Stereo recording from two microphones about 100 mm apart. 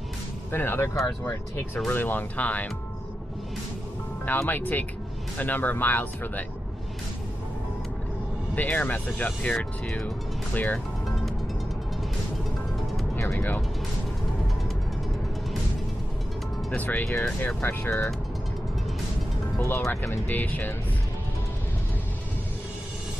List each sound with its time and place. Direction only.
0.5 s speech: 20° left (ahead or behind)
1.9 s speech: 20° left (ahead or behind)
4.3 s speech: 20° left (ahead or behind)
8.5 s speech: 15° left (ahead or behind)
16.7 s speech: 15° left (ahead or behind)
19.9 s speech: 20° left (ahead or behind)